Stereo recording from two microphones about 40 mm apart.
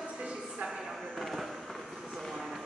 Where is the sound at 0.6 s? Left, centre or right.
Right.